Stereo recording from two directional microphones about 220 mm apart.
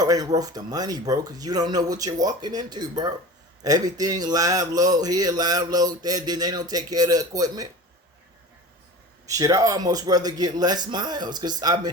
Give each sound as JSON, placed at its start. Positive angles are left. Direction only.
{"t": 0.0, "sound": "speech", "side_deg": -15}
{"t": 9.2, "sound": "speech", "side_deg": -15}